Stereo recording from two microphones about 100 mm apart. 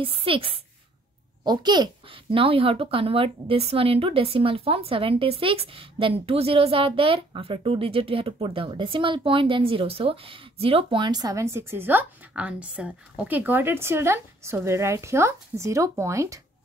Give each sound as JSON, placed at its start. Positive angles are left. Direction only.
{"t": 0.0, "sound": "speech", "side_deg": -65}
{"t": 1.4, "sound": "a child's voice", "side_deg": -45}
{"t": 2.0, "sound": "a woman's voice", "side_deg": -65}
{"t": 11.5, "sound": "a woman's voice", "side_deg": -25}